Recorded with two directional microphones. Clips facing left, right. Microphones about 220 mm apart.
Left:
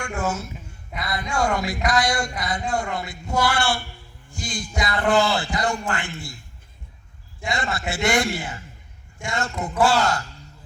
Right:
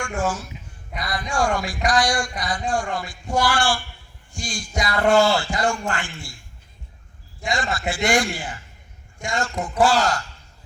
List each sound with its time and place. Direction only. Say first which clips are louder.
0.2 s a man's voice: right 1 dB; 25° left (ahead or behind)
7.5 s a man's voice: right 2 dB; 25° left (ahead or behind)